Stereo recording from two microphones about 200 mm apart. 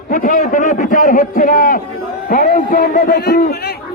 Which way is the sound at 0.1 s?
45° left (ahead or behind).